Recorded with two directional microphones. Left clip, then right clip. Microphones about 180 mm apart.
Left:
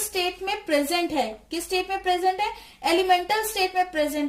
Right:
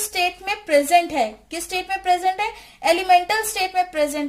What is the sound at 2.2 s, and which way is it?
A woman's voice, 45° right (ahead or behind).